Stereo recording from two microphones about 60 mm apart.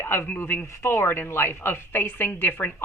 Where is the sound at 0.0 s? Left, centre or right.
Left.